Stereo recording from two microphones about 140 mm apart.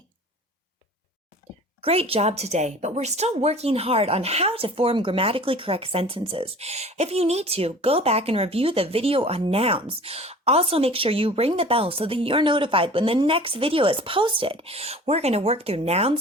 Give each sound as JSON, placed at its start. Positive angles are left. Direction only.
{"t": 1.8, "sound": "a woman's voice", "side_deg": -45}